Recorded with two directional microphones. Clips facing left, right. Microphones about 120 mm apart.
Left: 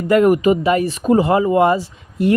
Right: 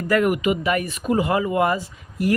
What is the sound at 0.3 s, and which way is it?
Speech, 35° left (ahead or behind).